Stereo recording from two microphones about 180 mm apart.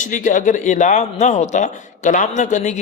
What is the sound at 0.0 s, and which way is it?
A man's voice, 45° left (ahead or behind).